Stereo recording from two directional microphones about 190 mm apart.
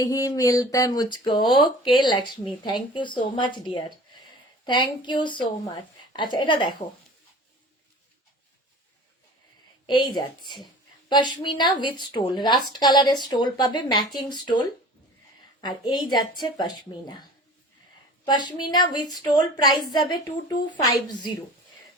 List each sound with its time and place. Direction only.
0.0 s speech: 20° left (ahead or behind)
9.8 s a woman's voice: 25° left (ahead or behind)
15.6 s speech: 25° left (ahead or behind)
18.3 s speech: 25° left (ahead or behind)